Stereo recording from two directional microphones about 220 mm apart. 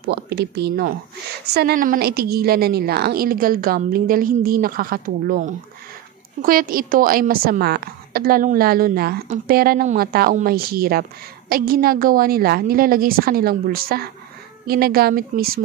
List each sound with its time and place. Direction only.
0.0 s a woman's voice: 50° right (ahead or behind)